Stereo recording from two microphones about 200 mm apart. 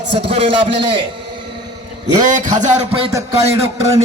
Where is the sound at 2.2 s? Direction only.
40° right (ahead or behind).